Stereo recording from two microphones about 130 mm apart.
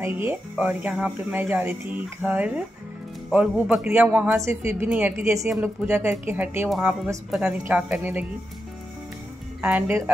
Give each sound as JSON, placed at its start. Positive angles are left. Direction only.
{"t": 0.0, "sound": "speech", "side_deg": -15}
{"t": 4.4, "sound": "a woman's voice", "side_deg": -20}
{"t": 4.8, "sound": "a woman's voice", "side_deg": -10}
{"t": 9.6, "sound": "speech", "side_deg": -10}